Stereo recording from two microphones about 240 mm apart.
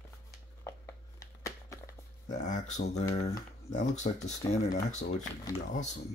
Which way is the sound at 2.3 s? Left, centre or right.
Left.